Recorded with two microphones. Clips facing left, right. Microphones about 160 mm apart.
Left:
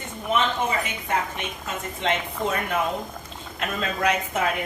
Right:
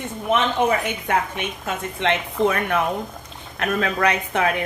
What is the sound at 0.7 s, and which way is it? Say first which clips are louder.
A woman's voice: right 5 dB; 60° right (ahead or behind).